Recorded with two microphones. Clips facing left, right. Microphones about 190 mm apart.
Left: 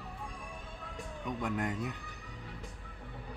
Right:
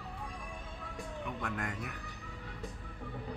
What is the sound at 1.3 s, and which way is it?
Speech, 15° left (ahead or behind).